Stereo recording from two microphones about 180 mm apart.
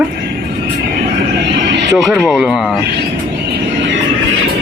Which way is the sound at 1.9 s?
Centre (ahead or behind).